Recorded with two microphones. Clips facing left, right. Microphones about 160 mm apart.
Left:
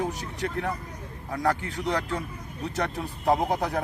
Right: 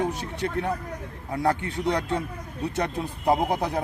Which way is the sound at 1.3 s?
25° right (ahead or behind).